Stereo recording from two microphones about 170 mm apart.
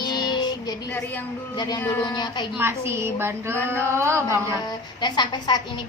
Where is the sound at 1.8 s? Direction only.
10° left (ahead or behind).